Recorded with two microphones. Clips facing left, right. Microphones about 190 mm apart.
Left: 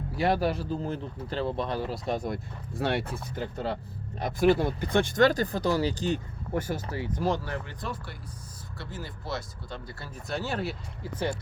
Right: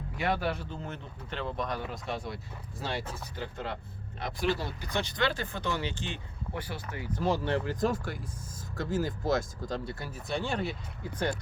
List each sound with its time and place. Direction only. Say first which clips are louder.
0.2 s speech: left 5 dB; 35° left (ahead or behind)
1.9 s speech: left 6 dB; 40° left (ahead or behind); by 3.1 s 60° left (ahead or behind)
3.3 s speech: left 6 dB; 40° left (ahead or behind)
4.2 s speech: left 8 dB; 50° left (ahead or behind); by 7.1 s 30° left (ahead or behind)
7.2 s speech: left 1 dB; centre (ahead or behind)
7.7 s speech: right 8 dB; 45° right (ahead or behind)
10.2 s speech: left 1 dB; 5° left (ahead or behind)